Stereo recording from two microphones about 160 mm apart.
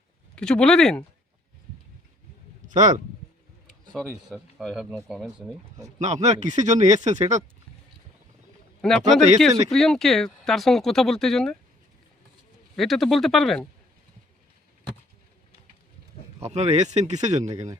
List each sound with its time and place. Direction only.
0.3 s speech: 5° left (ahead or behind)
2.6 s speech: 50° right (ahead or behind)
4.3 s speech: centre (ahead or behind)
6.2 s speech: 50° right (ahead or behind)
8.8 s speech: 5° left (ahead or behind)
12.7 s speech: centre (ahead or behind)
16.4 s speech: 40° right (ahead or behind)